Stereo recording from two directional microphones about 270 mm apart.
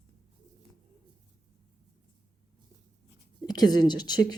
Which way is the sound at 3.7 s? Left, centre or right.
Centre.